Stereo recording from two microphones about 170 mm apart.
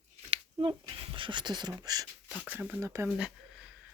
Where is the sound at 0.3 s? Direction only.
30° right (ahead or behind).